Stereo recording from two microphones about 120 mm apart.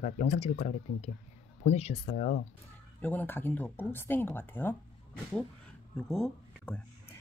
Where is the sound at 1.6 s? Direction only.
60° left (ahead or behind).